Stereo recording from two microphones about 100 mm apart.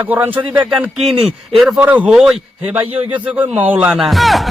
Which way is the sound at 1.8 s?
15° right (ahead or behind).